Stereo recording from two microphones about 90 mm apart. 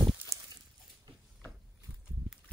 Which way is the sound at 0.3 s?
35° right (ahead or behind).